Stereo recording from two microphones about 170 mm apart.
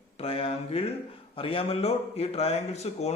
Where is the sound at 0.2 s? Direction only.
35° left (ahead or behind).